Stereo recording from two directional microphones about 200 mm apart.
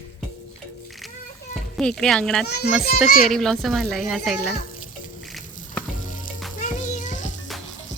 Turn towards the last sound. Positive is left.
turn(degrees=40)  # may be behind; listen again after turning